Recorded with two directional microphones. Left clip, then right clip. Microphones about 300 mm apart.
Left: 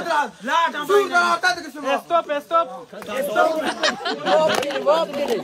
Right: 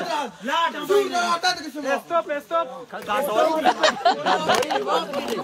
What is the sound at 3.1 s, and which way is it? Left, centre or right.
Speech, centre.